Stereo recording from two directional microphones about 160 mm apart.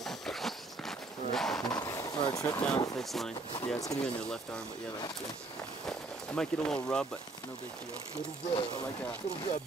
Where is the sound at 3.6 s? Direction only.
20° left (ahead or behind).